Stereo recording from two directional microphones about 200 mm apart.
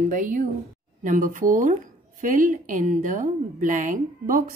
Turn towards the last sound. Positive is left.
turn(degrees=-40)  # may be behind; listen again after turning